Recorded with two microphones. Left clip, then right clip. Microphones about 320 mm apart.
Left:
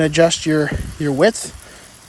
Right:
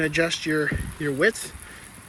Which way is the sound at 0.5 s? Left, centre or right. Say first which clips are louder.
Left 6 dB; left.